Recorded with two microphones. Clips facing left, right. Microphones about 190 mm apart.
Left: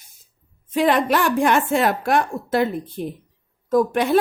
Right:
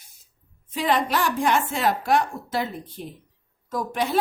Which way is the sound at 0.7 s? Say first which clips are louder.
Left 5 dB; 60° left (ahead or behind).